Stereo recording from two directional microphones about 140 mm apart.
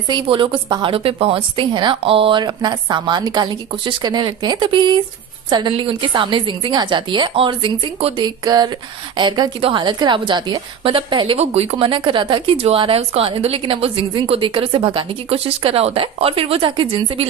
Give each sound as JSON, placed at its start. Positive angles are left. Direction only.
{"t": 0.1, "sound": "a woman's voice", "side_deg": -35}
{"t": 8.1, "sound": "a sound", "side_deg": -30}
{"t": 9.1, "sound": "a woman's voice", "side_deg": -30}